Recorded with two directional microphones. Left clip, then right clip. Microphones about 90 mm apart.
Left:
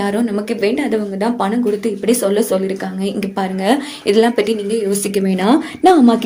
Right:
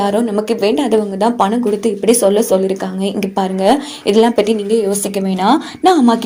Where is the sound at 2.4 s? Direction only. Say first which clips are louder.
Right 3 dB; 25° right (ahead or behind).